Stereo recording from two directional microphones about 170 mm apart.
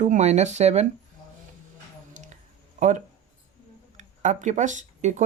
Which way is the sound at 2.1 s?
45° right (ahead or behind).